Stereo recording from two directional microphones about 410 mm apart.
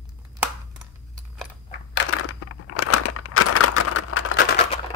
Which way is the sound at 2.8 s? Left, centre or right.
Left.